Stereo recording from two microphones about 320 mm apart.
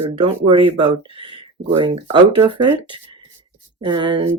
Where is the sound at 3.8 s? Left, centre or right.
Centre.